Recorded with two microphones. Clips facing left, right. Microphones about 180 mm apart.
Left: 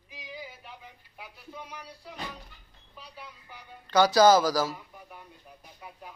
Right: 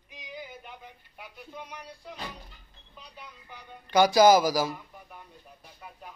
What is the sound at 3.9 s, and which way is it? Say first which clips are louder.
Speech: right 1 dB; 15° right (ahead or behind).